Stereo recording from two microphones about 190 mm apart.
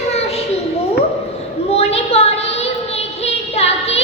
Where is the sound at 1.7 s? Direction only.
35° left (ahead or behind).